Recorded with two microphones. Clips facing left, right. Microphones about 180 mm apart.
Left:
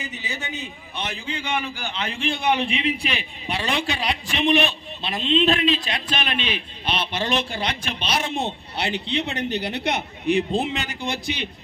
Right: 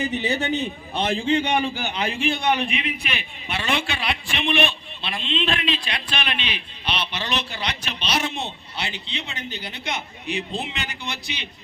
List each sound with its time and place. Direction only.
0.0 s a man's voice: 65° right (ahead or behind)
1.4 s a man's voice: 30° right (ahead or behind); by 2.4 s 5° right (ahead or behind)
2.6 s a man's voice: 30° left (ahead or behind); by 11.4 s 50° left (ahead or behind)